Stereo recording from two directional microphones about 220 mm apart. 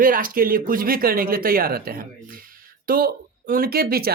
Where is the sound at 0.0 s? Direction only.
40° right (ahead or behind).